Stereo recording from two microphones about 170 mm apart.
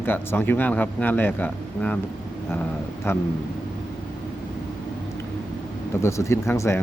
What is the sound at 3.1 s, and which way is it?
Speech, 15° left (ahead or behind).